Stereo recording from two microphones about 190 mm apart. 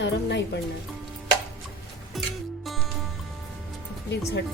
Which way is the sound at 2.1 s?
Centre (ahead or behind).